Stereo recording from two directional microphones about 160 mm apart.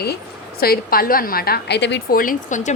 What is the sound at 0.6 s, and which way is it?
A woman's voice, 70° left (ahead or behind).